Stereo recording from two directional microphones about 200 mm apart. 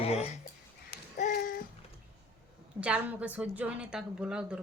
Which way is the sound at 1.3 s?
45° left (ahead or behind).